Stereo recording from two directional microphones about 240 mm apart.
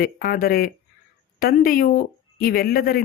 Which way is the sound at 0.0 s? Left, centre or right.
Left.